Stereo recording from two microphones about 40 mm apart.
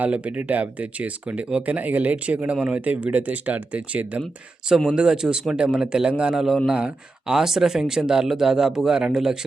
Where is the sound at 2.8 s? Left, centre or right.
Right.